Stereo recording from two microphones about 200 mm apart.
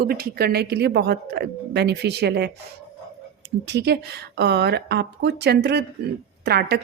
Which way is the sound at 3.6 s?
55° right (ahead or behind).